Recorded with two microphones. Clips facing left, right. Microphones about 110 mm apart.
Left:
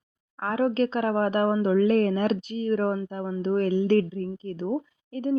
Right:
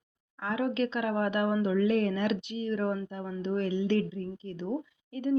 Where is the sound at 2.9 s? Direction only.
35° left (ahead or behind).